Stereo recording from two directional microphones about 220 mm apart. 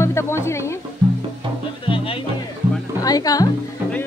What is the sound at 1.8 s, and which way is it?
A woman's voice, 25° left (ahead or behind).